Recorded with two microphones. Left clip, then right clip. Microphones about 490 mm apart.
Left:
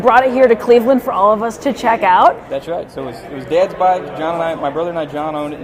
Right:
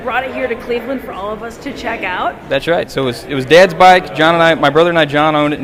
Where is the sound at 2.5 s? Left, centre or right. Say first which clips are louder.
Right 7 dB; right.